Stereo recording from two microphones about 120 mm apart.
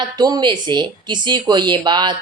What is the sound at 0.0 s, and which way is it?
Speech, 35° right (ahead or behind).